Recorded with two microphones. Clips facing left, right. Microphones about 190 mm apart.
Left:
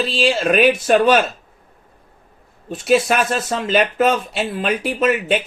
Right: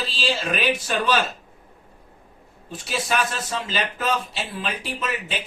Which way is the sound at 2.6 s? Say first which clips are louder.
Left 11 dB; 60° left (ahead or behind).